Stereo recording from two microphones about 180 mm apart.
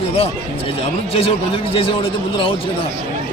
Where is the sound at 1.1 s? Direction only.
35° left (ahead or behind).